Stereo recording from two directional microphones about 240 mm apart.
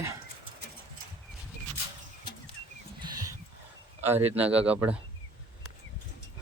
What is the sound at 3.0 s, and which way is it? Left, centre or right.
Wild animals, centre.